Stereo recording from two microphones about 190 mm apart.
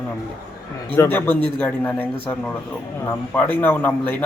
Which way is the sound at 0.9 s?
10° left (ahead or behind).